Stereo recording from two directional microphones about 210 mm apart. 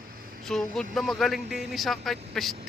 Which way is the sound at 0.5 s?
Centre (ahead or behind).